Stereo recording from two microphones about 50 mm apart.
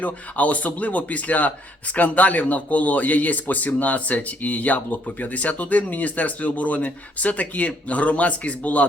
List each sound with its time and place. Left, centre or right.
0.0 s speech: left